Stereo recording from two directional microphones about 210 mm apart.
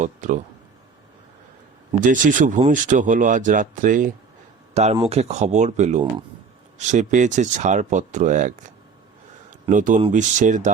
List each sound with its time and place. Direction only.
0.0 s a man's voice: 35° right (ahead or behind)
2.0 s speech: 40° right (ahead or behind)
9.5 s a sound: 40° right (ahead or behind)
10.0 s speech: 35° right (ahead or behind)